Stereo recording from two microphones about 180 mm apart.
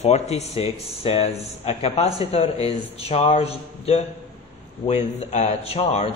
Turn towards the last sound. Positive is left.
turn(degrees=35)  # may be behind; listen again after turning